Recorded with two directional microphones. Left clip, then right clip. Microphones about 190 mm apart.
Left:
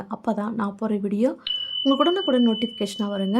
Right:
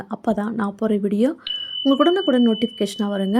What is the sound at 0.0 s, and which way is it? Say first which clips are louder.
Speech: right 3 dB; 15° right (ahead or behind).